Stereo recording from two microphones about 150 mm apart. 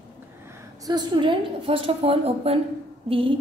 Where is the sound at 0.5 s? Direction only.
25° right (ahead or behind).